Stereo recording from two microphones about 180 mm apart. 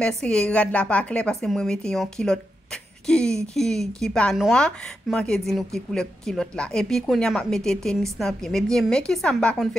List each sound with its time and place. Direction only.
0.0 s a woman's voice: 5° left (ahead or behind)